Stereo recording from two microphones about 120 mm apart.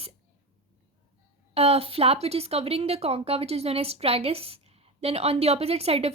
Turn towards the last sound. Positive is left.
turn(degrees=-60)  # may be behind; listen again after turning